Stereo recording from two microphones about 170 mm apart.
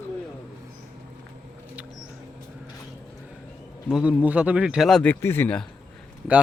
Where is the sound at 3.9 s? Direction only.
5° right (ahead or behind).